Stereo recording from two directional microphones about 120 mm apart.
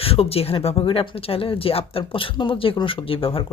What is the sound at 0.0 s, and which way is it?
Speech, 55° left (ahead or behind).